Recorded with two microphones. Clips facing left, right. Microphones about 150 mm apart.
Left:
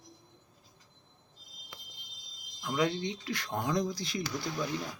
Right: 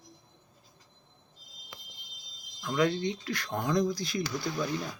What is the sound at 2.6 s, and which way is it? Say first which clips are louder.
Speech: right 3 dB; 20° left (ahead or behind).